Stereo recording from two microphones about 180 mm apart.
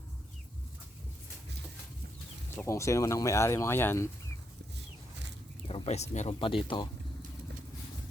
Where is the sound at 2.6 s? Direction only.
15° left (ahead or behind).